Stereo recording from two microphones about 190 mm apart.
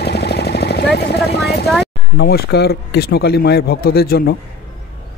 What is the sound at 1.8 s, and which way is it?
Speech, 55° left (ahead or behind).